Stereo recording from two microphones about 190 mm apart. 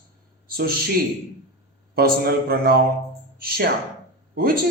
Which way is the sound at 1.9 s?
50° right (ahead or behind).